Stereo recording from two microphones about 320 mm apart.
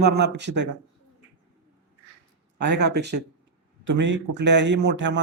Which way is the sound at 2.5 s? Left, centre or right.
Right.